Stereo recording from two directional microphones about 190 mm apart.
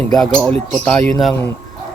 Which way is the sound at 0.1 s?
5° left (ahead or behind).